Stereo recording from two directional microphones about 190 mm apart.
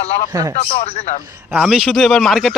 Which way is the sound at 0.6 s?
35° left (ahead or behind).